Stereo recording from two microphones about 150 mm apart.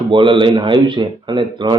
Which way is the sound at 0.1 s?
35° right (ahead or behind).